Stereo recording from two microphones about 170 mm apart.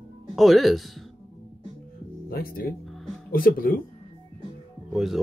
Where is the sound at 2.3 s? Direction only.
60° left (ahead or behind).